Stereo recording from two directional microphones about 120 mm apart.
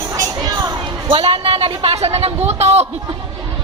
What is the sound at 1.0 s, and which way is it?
A woman's voice, 45° right (ahead or behind).